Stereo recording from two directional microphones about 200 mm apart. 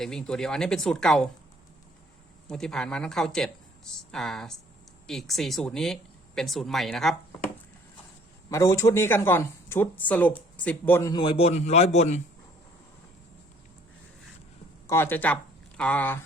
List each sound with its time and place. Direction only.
0.0 s speech: 5° left (ahead or behind)
2.5 s speech: 5° left (ahead or behind)
8.4 s speech: 15° left (ahead or behind); by 12.2 s 35° left (ahead or behind)
14.8 s speech: 10° left (ahead or behind)